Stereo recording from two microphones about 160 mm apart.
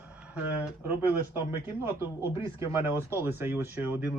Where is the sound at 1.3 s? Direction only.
15° right (ahead or behind).